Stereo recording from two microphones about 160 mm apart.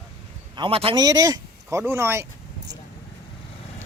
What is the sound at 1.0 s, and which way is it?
Speech, 25° right (ahead or behind).